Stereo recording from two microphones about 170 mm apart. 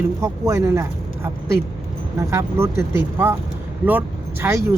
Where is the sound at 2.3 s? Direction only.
15° right (ahead or behind).